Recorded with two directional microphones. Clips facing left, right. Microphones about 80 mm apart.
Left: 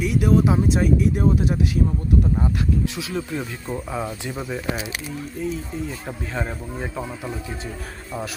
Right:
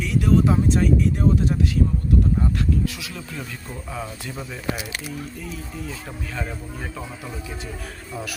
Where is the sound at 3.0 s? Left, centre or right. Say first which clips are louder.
Left 7 dB; left.